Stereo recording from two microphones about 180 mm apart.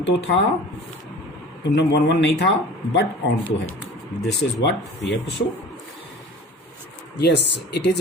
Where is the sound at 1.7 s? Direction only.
70° left (ahead or behind).